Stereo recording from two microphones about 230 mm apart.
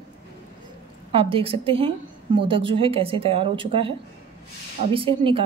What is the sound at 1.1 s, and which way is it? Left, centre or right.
A woman's voice, right.